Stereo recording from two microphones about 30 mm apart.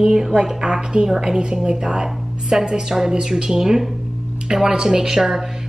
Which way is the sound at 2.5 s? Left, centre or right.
Centre.